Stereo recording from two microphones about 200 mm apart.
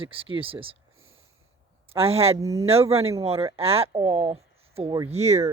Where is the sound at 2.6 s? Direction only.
30° right (ahead or behind).